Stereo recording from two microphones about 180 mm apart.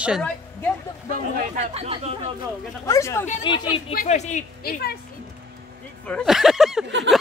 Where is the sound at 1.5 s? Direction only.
35° right (ahead or behind).